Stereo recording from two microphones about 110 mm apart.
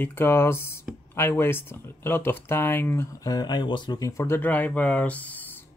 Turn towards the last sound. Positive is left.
turn(degrees=15)  # may be behind; listen again after turning